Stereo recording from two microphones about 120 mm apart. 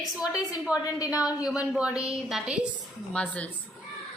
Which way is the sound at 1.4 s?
10° right (ahead or behind).